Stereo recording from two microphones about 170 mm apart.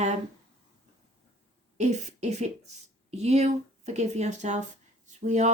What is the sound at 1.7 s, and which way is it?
A woman's voice, 45° right (ahead or behind).